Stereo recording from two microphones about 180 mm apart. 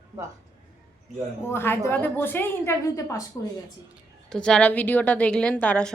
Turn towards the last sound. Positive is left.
turn(degrees=5)  # may be behind; listen again after turning